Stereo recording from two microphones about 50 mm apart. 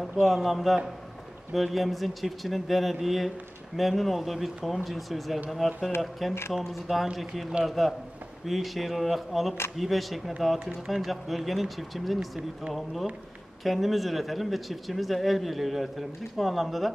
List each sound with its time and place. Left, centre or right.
0.0 s a man's voice: centre
13.7 s speech: centre